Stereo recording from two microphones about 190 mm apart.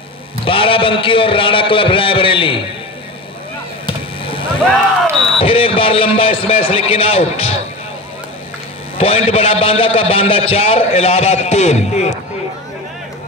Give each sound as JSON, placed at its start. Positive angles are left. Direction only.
{"t": 0.5, "sound": "a man's voice", "side_deg": 30}
{"t": 3.8, "sound": "a sound", "side_deg": 30}
{"t": 5.4, "sound": "a man's voice", "side_deg": 30}
{"t": 8.9, "sound": "a man's voice", "side_deg": 30}